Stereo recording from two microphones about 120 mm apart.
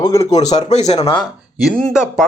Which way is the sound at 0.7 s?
65° left (ahead or behind).